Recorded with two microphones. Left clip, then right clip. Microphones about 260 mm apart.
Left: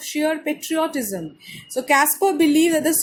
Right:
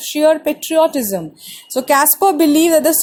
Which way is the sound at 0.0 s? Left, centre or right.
Right.